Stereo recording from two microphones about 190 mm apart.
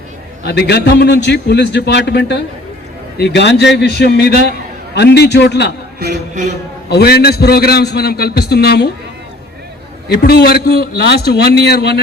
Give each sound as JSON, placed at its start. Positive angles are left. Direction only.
{"t": 0.4, "sound": "a man's voice", "side_deg": 60}
{"t": 6.9, "sound": "a man's voice", "side_deg": 55}
{"t": 10.1, "sound": "a man's voice", "side_deg": 55}